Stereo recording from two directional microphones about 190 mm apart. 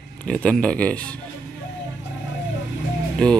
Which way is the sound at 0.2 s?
5° left (ahead or behind).